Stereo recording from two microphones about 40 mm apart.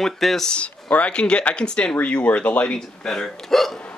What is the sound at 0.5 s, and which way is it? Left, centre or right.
Speech, left.